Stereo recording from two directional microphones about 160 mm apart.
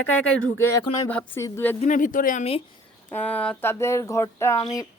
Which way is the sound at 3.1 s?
10° left (ahead or behind).